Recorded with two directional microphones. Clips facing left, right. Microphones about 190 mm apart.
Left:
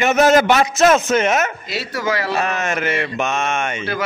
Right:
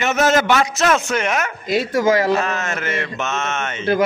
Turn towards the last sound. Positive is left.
turn(degrees=15)  # may be behind; listen again after turning